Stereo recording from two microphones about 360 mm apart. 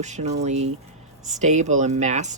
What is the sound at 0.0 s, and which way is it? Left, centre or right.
Speech, centre.